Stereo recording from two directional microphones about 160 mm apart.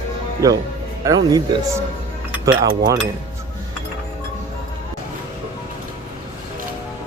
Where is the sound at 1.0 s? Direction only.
20° right (ahead or behind).